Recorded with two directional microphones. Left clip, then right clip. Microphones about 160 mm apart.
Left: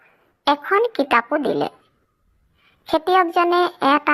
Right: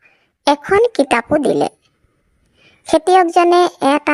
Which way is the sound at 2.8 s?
45° right (ahead or behind).